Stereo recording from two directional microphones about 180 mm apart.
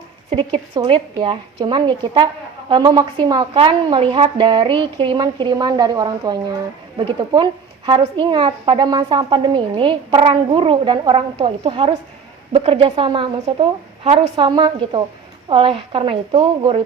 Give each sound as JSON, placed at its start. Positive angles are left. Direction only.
{"t": 0.3, "sound": "a woman's voice", "side_deg": -30}